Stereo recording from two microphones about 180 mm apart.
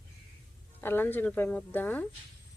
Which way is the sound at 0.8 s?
10° left (ahead or behind).